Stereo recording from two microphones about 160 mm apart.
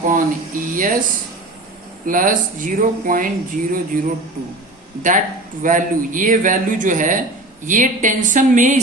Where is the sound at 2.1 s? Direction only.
55° right (ahead or behind).